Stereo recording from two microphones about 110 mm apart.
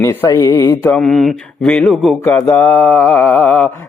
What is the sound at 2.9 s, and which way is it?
Speech, 20° left (ahead or behind).